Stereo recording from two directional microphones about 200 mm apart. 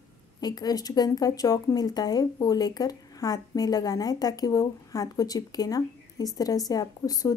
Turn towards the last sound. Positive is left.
turn(degrees=20)  # may be behind; listen again after turning